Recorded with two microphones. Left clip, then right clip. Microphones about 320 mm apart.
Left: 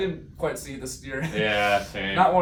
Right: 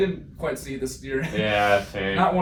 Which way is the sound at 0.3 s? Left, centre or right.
Centre.